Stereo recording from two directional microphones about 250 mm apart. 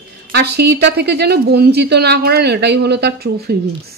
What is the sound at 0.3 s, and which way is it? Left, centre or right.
A woman's voice, right.